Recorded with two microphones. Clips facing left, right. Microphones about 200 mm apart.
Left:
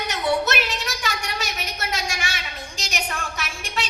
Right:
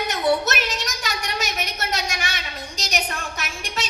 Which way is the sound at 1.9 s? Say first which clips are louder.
Left 1 dB; 40° right (ahead or behind).